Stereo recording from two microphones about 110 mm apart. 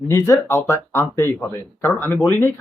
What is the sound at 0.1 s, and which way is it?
Speech, 30° left (ahead or behind).